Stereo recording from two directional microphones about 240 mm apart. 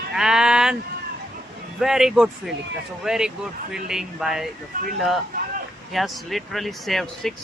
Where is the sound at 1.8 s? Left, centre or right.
Centre.